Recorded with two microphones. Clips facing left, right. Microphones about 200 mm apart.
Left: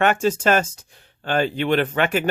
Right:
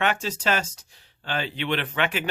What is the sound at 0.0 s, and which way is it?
Speech, 50° left (ahead or behind).